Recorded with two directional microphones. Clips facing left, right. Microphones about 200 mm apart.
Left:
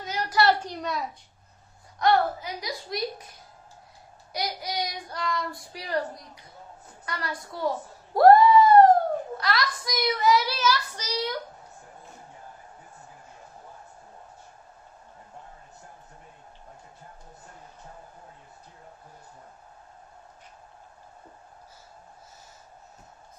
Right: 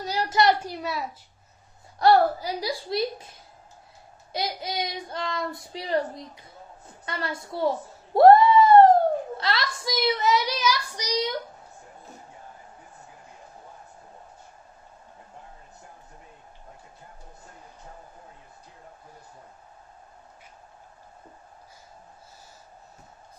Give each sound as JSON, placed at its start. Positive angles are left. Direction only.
{"t": 0.0, "sound": "a sound", "side_deg": -30}
{"t": 0.4, "sound": "a woman's voice", "side_deg": -10}
{"t": 2.0, "sound": "a woman's voice", "side_deg": -35}
{"t": 4.3, "sound": "speech", "side_deg": -25}